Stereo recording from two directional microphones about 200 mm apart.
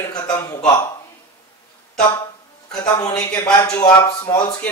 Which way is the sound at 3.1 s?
10° left (ahead or behind).